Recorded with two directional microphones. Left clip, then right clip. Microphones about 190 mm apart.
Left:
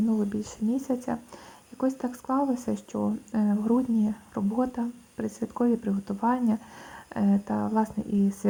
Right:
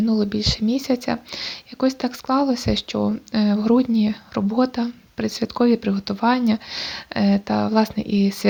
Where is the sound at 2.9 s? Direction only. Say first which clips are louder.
Right 7 dB; 45° right (ahead or behind).